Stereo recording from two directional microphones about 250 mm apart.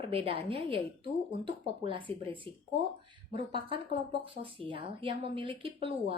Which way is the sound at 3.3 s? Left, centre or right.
Right.